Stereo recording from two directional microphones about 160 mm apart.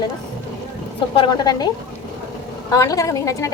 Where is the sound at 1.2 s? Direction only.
25° left (ahead or behind).